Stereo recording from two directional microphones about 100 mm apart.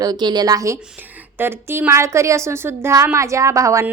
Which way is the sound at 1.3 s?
20° right (ahead or behind).